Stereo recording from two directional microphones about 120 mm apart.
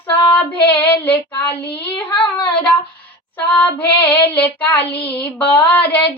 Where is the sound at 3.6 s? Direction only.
15° left (ahead or behind).